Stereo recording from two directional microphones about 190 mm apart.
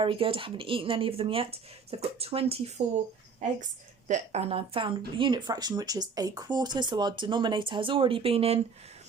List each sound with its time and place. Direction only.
0.0 s speech: 30° right (ahead or behind)
4.1 s speech: 35° right (ahead or behind)